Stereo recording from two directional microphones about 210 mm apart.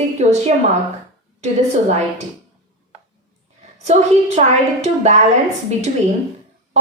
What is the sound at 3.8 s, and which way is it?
A woman's voice, 30° right (ahead or behind).